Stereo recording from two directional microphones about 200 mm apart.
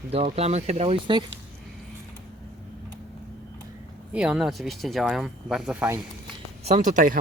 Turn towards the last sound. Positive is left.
turn(degrees=-40)  # may be behind; listen again after turning